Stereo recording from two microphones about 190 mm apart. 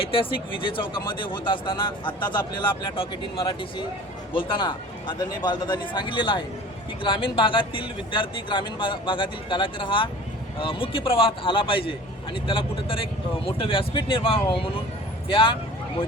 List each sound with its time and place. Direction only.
0.0 s speech: 25° left (ahead or behind)